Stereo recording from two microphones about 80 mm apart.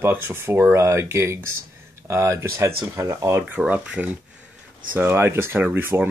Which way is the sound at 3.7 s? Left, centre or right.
Centre.